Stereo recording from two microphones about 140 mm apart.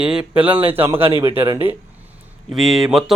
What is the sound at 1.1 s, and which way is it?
Speech, 40° right (ahead or behind).